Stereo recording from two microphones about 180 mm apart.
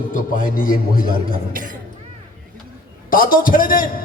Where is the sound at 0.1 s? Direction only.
45° left (ahead or behind).